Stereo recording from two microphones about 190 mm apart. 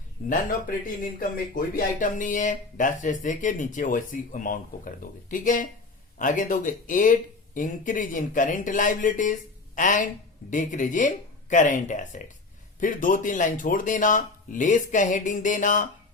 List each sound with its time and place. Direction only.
1.5 s speech: 45° left (ahead or behind)